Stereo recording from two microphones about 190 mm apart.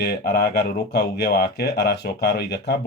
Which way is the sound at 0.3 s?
60° left (ahead or behind).